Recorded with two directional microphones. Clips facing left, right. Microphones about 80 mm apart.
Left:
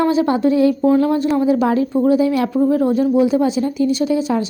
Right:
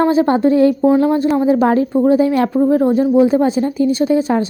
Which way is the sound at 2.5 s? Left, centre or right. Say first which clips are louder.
Right 2 dB; right.